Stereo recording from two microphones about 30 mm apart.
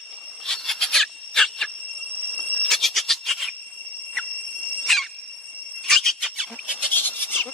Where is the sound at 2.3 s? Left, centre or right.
Left.